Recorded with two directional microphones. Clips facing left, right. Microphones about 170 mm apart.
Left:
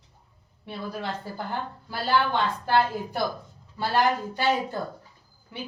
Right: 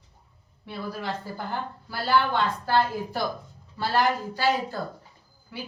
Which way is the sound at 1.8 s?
20° left (ahead or behind).